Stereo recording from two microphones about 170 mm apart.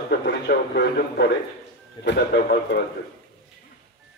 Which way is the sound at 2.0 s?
85° left.